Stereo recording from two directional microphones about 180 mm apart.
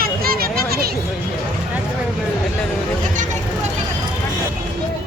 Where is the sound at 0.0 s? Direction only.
55° right (ahead or behind).